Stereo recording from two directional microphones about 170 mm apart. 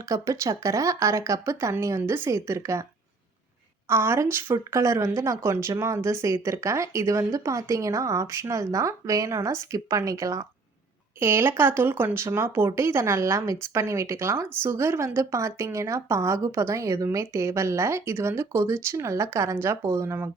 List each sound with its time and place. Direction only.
0.0 s a woman's voice: 20° right (ahead or behind)
3.8 s a woman's voice: 15° right (ahead or behind)